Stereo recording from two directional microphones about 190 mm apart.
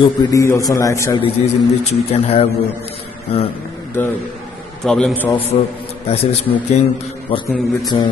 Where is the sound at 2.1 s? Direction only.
35° left (ahead or behind).